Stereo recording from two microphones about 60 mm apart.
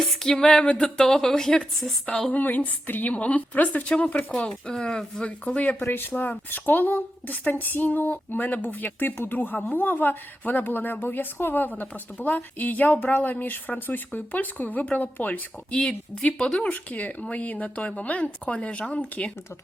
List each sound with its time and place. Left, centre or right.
0.2 s speech: centre
2.3 s a woman's voice: left
5.8 s a woman's voice: left
15.7 s a woman's voice: centre